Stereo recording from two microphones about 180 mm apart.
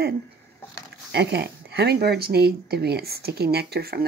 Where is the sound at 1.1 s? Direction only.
65° right (ahead or behind).